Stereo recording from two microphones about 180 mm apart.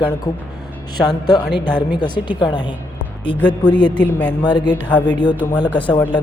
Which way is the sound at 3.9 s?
10° left (ahead or behind).